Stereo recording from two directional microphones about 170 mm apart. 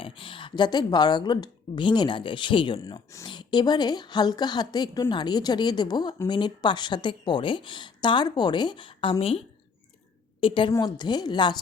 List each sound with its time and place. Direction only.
0.0 s speech: 30° left (ahead or behind)
10.4 s speech: 30° left (ahead or behind)